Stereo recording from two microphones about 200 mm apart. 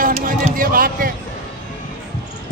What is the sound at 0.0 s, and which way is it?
Music, 40° right (ahead or behind).